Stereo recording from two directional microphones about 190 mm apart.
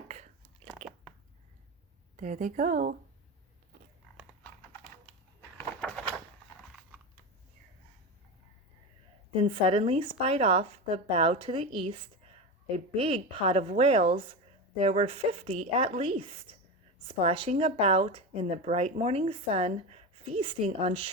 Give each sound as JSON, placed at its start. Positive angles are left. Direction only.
{"t": 0.1, "sound": "biting", "side_deg": -35}
{"t": 2.1, "sound": "a woman's voice", "side_deg": -45}
{"t": 9.4, "sound": "speech", "side_deg": -30}